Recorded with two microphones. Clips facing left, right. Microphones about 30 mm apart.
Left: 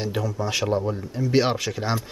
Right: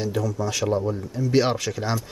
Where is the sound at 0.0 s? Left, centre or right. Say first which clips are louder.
Right 1 dB; left.